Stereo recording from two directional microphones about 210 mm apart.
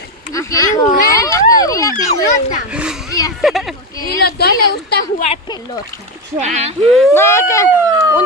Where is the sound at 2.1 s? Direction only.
35° left (ahead or behind).